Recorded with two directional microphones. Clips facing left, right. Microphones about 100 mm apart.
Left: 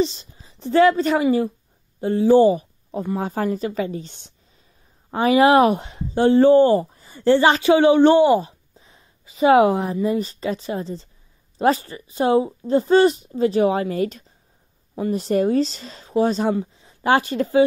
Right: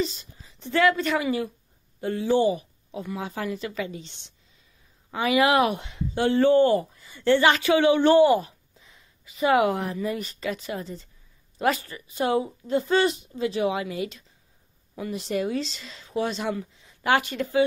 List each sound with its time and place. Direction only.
0.0 s a woman's voice: 25° left (ahead or behind)
2.2 s speech: 40° left (ahead or behind)